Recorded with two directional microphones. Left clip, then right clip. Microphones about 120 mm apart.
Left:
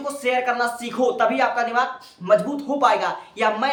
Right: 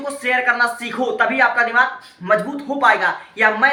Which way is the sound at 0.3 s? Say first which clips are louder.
Right 5 dB; 45° left (ahead or behind).